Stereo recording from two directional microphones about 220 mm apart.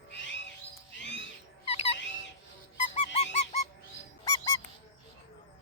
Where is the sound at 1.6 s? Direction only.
25° left (ahead or behind).